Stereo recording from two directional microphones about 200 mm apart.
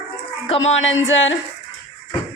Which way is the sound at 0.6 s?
75° left (ahead or behind).